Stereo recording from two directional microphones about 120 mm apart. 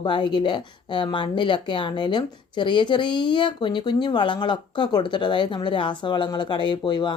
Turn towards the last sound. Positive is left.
turn(degrees=40)  # may be behind; listen again after turning